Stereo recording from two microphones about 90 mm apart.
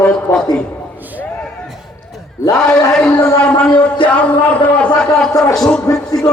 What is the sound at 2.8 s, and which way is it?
A man's voice, 5° left (ahead or behind).